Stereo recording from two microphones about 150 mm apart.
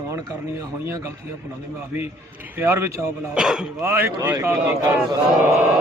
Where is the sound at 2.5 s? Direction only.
15° right (ahead or behind).